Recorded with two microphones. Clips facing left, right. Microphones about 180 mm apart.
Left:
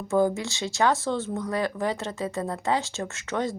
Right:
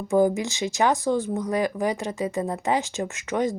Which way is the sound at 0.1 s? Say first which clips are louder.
Right 3 dB; 15° right (ahead or behind).